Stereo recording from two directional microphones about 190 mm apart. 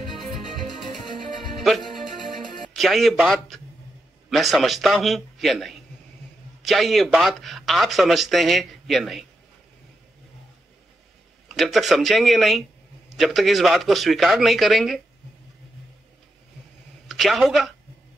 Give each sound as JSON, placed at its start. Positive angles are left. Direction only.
{"t": 2.0, "sound": "music", "side_deg": 0}
{"t": 4.3, "sound": "speech", "side_deg": 0}
{"t": 11.4, "sound": "speech", "side_deg": 0}
{"t": 17.1, "sound": "speech", "side_deg": 0}